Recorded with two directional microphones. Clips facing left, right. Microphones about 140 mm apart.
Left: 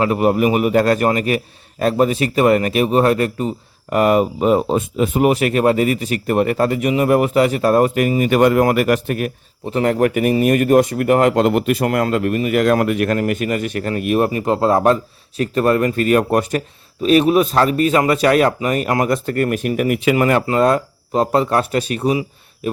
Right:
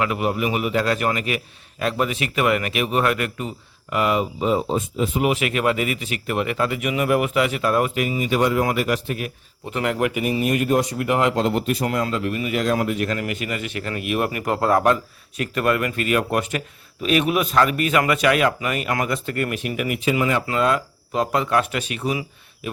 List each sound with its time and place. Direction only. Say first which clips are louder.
0.0 s speech: left 7 dB; 40° left (ahead or behind)
9.6 s speech: left 6 dB; 35° left (ahead or behind); by 13.1 s 60° left (ahead or behind)
13.1 s speech: left 8 dB; 45° left (ahead or behind)
14.3 s speech: left 4 dB; 25° left (ahead or behind); by 20.0 s 45° left (ahead or behind)
20.0 s speech: left 4 dB; 65° left (ahead or behind)
20.5 s speech: left 6 dB; 40° left (ahead or behind)